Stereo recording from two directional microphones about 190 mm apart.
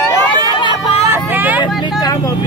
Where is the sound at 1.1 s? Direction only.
10° right (ahead or behind).